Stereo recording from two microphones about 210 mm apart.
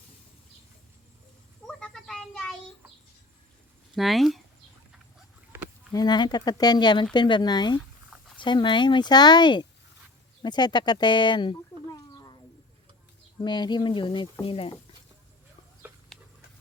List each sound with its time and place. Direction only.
1.6 s a sound: 5° left (ahead or behind)
3.9 s speech: centre (ahead or behind)
5.9 s speech: 20° left (ahead or behind)
13.4 s speech: 20° left (ahead or behind)